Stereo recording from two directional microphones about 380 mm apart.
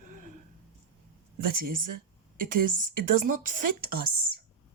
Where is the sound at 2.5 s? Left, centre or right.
Right.